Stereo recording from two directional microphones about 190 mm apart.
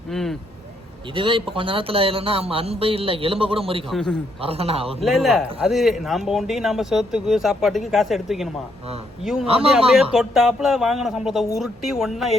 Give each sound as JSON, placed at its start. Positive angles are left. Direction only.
{"t": 0.1, "sound": "vehicle", "side_deg": 0}
{"t": 1.1, "sound": "speech", "side_deg": -25}
{"t": 3.8, "sound": "speech", "side_deg": 0}
{"t": 4.4, "sound": "a man's voice", "side_deg": -30}
{"t": 5.0, "sound": "speech", "side_deg": 0}